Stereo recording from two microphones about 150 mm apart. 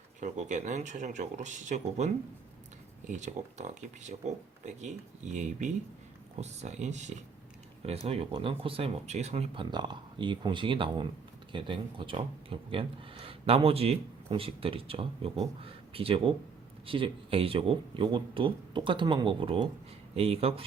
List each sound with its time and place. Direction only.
0.2 s speech: 55° right (ahead or behind)
3.1 s speech: 55° right (ahead or behind)
8.0 s speech: 40° right (ahead or behind)
9.6 s speech: 30° right (ahead or behind)